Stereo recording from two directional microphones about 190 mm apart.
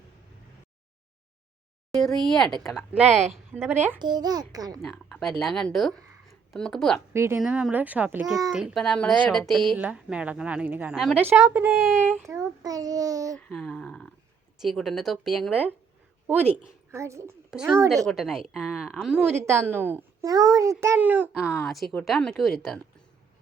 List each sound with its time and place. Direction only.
1.9 s a sound: centre (ahead or behind)
2.6 s a woman's voice: 5° right (ahead or behind)
4.0 s a child's voice: 20° right (ahead or behind)
4.8 s speech: 5° left (ahead or behind)
7.1 s a woman's voice: 15° right (ahead or behind)
13.3 s a woman's voice: 5° left (ahead or behind)
16.9 s a woman's voice: 15° right (ahead or behind)
17.5 s a woman's voice: 5° right (ahead or behind)